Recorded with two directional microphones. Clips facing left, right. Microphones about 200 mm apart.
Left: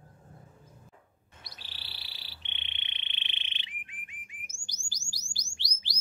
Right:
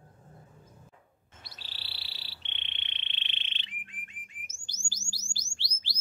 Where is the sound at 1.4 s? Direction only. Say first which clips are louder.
Even; 15° left (ahead or behind).